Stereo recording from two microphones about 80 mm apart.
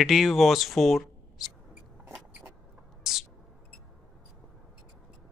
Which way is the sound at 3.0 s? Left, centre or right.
Centre.